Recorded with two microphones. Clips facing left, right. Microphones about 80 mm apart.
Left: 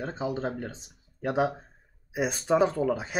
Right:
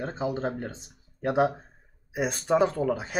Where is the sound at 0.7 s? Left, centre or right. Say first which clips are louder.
Right 2 dB; right.